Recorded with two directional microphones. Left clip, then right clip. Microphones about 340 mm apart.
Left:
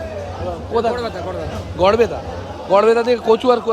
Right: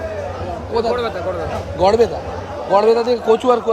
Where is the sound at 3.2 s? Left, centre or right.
Centre.